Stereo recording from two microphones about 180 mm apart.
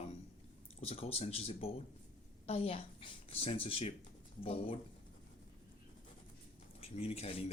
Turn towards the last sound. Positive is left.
turn(degrees=35)  # may be behind; listen again after turning